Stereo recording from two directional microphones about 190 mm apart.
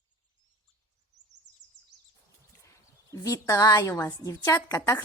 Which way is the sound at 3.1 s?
15° left (ahead or behind).